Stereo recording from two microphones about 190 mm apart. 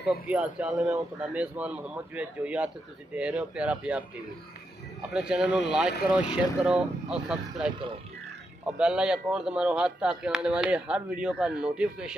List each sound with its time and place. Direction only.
0.1 s a man's voice: 5° right (ahead or behind)
5.1 s speech: 5° right (ahead or behind)
8.7 s speech: 5° right (ahead or behind)